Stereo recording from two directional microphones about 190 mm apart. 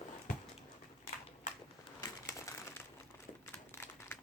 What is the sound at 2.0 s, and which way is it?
Crumpling, 15° left (ahead or behind).